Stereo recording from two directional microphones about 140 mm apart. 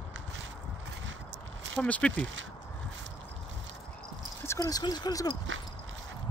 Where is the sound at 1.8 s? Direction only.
10° left (ahead or behind).